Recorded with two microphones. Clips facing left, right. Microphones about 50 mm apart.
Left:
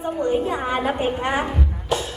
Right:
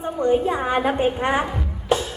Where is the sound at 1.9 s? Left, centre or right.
Right.